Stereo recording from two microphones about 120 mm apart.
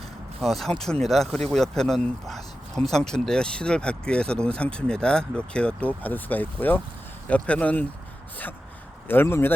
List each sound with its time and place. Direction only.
0.4 s speech: centre (ahead or behind)
9.0 s speech: 20° left (ahead or behind)